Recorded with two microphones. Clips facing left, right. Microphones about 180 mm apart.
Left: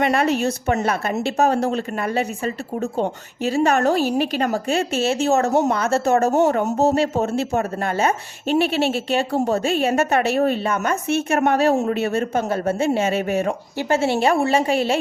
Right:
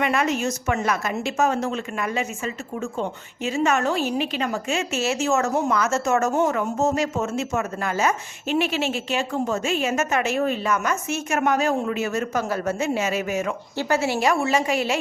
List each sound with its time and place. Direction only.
0.0 s a woman's voice: 35° left (ahead or behind)